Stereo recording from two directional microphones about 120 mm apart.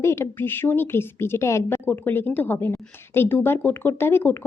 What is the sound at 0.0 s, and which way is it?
A woman's voice, 20° left (ahead or behind).